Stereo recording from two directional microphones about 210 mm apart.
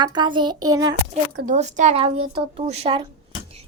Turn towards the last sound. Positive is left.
turn(degrees=-25)  # may be behind; listen again after turning